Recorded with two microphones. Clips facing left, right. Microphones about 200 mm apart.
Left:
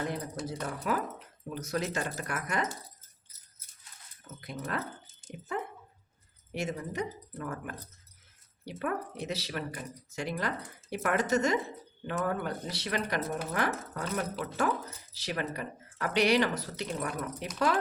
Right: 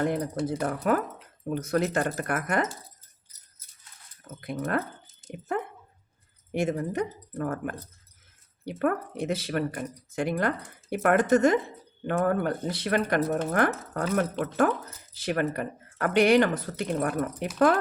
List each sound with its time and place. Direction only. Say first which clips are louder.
0.0 s speech: right 8 dB; 55° right (ahead or behind)
4.4 s speech: right 7 dB; 55° right (ahead or behind)